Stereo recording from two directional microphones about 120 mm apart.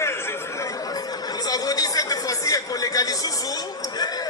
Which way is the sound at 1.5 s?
30° left (ahead or behind).